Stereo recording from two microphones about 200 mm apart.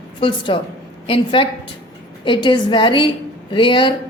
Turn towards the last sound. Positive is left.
turn(degrees=25)  # may be behind; listen again after turning